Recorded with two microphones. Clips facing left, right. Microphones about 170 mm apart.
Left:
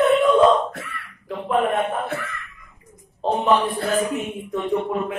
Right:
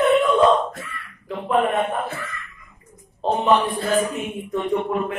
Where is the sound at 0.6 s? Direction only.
65° left (ahead or behind).